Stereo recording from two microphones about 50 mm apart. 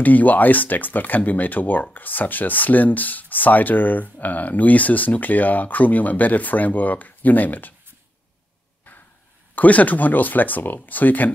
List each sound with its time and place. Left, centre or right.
0.0 s speech: left
9.6 s speech: left